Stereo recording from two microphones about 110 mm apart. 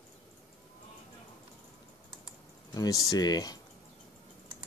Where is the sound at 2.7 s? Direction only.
30° left (ahead or behind).